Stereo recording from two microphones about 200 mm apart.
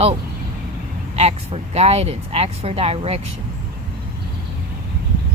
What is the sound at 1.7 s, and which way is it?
Speech, 30° right (ahead or behind).